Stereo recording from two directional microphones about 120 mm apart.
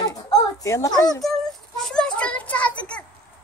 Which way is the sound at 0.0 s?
30° left (ahead or behind).